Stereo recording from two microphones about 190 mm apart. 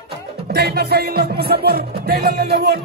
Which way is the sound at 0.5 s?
55° right (ahead or behind).